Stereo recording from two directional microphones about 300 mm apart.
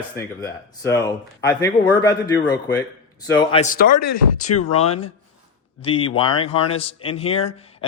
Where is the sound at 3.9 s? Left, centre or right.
Left.